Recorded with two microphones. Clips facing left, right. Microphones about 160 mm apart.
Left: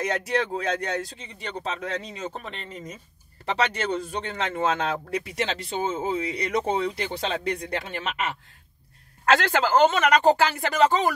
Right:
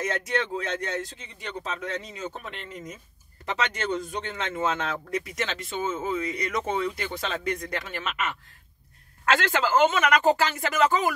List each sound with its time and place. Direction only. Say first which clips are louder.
0.0 s a man's voice: left 2 dB; 35° left (ahead or behind)